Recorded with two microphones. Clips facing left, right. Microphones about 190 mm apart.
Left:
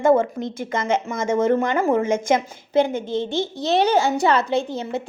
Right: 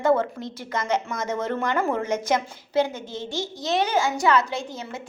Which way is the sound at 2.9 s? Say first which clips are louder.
Left 8 dB; 55° left (ahead or behind).